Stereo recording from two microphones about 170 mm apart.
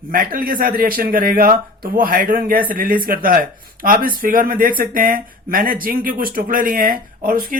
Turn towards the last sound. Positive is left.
turn(degrees=-55)  # may be behind; listen again after turning